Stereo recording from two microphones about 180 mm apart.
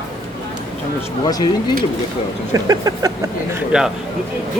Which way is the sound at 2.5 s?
20° right (ahead or behind).